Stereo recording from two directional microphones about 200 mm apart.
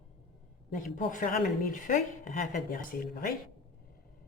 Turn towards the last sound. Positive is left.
turn(degrees=45)  # may be behind; listen again after turning